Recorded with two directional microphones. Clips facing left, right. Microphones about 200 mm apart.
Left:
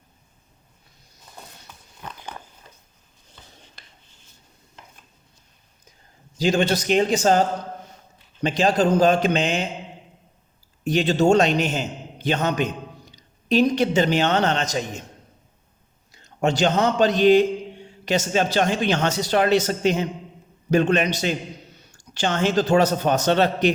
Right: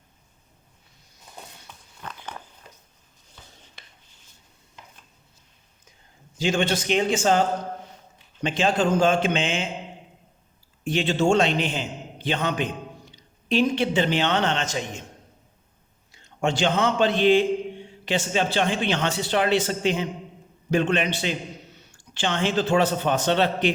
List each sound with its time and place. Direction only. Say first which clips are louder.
2.0 s a sound: left 1 dB; 15° left (ahead or behind)
6.3 s speech: left 3 dB; 40° left (ahead or behind)
10.8 s a man's voice: left 3 dB; 40° left (ahead or behind)
16.1 s a man's voice: left 3 dB; 40° left (ahead or behind)